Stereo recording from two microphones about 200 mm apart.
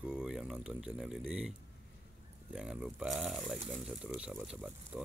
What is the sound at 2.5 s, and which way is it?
Speech, 5° right (ahead or behind).